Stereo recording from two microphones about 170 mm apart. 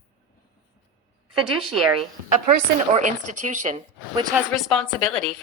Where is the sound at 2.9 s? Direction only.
45° right (ahead or behind).